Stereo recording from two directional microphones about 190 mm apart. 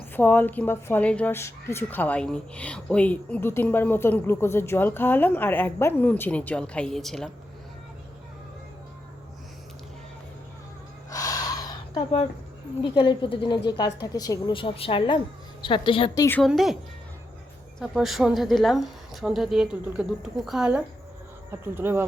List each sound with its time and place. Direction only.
0.1 s a woman's voice: 10° left (ahead or behind)
11.1 s a sound: 20° left (ahead or behind)
12.8 s a woman's voice: 25° left (ahead or behind)
16.4 s a woman's voice: centre (ahead or behind)
17.7 s a woman's voice: centre (ahead or behind)